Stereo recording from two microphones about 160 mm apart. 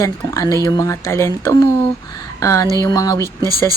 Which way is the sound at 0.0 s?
20° left (ahead or behind).